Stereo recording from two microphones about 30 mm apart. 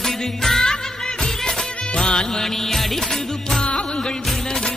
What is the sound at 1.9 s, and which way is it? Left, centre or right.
Music, left.